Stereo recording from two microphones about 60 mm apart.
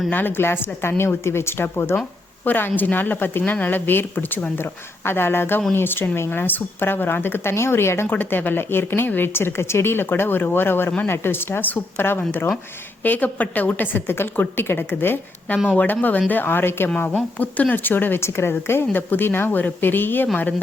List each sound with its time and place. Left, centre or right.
0.1 s a woman's voice: left
2.4 s speech: left
8.1 s speech: left
15.7 s speech: left
17.1 s speech: left
18.2 s speech: left